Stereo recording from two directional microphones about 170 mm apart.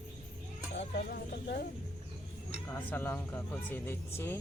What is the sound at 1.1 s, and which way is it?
Speech, 65° left (ahead or behind).